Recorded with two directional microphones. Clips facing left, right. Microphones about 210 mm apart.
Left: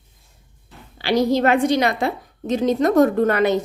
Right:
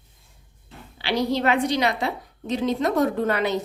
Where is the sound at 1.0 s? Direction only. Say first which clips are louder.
Left 6 dB; 45° left (ahead or behind).